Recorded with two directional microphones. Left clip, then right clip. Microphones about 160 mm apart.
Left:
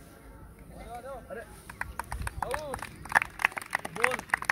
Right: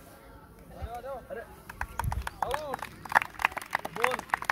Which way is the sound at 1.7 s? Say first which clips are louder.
Right 2 dB; 25° right (ahead or behind).